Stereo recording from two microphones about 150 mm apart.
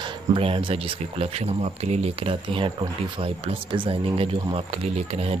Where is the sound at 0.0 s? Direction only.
35° right (ahead or behind).